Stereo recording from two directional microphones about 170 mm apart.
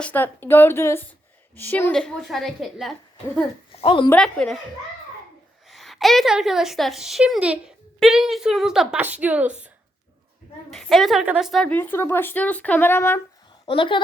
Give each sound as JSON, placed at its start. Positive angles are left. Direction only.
{"t": 0.0, "sound": "a woman's voice", "side_deg": 10}
{"t": 3.7, "sound": "a sound", "side_deg": 35}
{"t": 4.1, "sound": "a woman's voice", "side_deg": 5}
{"t": 5.6, "sound": "a woman's voice", "side_deg": 0}
{"t": 10.7, "sound": "a woman's voice", "side_deg": 0}
{"t": 11.7, "sound": "speech", "side_deg": 10}
{"t": 13.7, "sound": "a woman's voice", "side_deg": 30}